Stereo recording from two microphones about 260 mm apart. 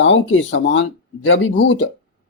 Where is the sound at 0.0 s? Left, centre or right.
Left.